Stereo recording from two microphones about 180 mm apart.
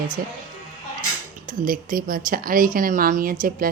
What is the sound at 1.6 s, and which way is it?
A woman's voice, 50° right (ahead or behind).